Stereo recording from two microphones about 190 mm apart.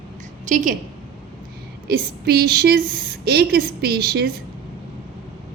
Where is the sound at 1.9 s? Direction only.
55° right (ahead or behind).